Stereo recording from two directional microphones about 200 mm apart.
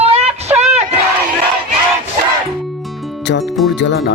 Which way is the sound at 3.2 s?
60° left (ahead or behind).